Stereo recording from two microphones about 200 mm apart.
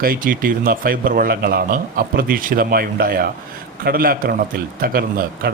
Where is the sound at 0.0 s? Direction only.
45° right (ahead or behind).